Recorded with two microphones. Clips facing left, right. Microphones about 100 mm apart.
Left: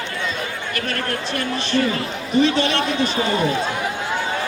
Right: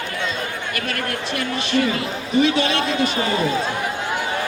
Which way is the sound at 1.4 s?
40° left (ahead or behind).